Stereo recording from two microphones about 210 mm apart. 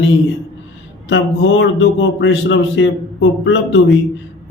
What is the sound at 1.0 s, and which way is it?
Speech, 60° left (ahead or behind).